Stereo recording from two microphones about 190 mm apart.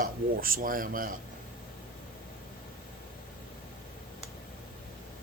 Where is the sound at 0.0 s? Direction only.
50° right (ahead or behind).